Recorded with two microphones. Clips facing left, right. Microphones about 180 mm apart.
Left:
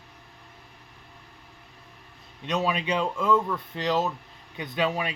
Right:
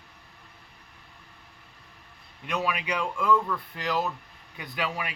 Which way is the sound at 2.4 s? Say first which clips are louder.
Left 3 dB; 25° left (ahead or behind).